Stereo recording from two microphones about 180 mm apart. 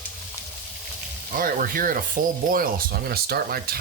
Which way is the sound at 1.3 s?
50° right (ahead or behind).